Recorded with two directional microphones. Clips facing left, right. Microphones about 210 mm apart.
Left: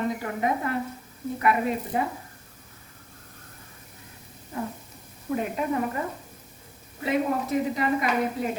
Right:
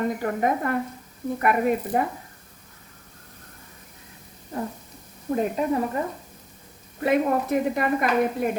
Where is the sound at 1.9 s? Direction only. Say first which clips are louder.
Right 3 dB; 50° right (ahead or behind).